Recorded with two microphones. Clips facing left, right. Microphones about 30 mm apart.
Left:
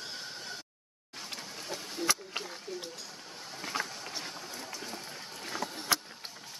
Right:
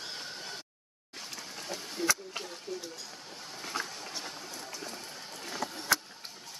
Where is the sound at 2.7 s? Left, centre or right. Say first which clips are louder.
Right 2 dB; centre.